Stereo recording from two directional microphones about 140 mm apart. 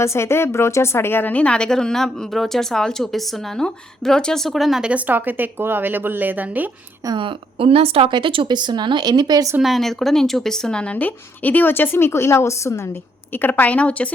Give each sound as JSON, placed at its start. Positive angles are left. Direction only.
{"t": 0.0, "sound": "a woman's voice", "side_deg": 20}
{"t": 7.0, "sound": "speech", "side_deg": -35}
{"t": 9.6, "sound": "speech", "side_deg": 0}